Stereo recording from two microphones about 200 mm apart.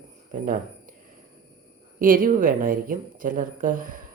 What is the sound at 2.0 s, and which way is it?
Speech, 45° right (ahead or behind).